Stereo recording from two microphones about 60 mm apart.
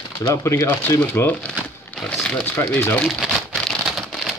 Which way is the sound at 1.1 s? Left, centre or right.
Left.